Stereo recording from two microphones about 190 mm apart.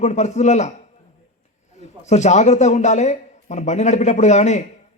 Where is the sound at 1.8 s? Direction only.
35° left (ahead or behind).